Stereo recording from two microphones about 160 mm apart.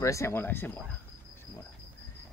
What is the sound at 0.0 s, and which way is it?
Speech, 20° left (ahead or behind).